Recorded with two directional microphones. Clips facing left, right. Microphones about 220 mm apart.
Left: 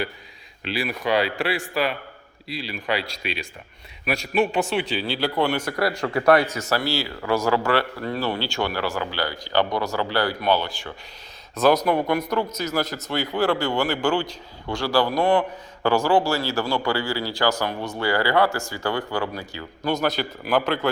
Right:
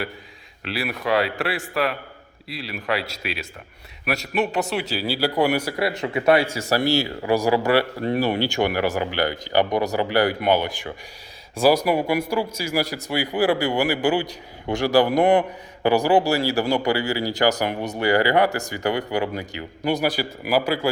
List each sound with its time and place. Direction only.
0.6 s speech: centre (ahead or behind)
6.0 s a man's voice: 20° right (ahead or behind)
6.7 s a man's voice: 15° right (ahead or behind)